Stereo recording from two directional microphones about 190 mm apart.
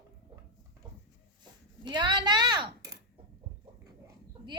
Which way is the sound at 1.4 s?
25° right (ahead or behind).